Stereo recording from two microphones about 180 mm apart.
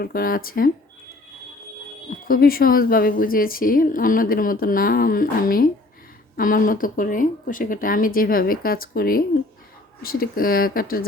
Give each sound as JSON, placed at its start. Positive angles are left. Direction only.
{"t": 0.0, "sound": "speech", "side_deg": 55}
{"t": 2.0, "sound": "speech", "side_deg": 50}